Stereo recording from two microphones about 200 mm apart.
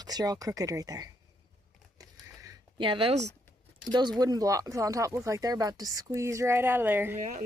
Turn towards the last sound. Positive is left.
turn(degrees=-10)  # may be behind; listen again after turning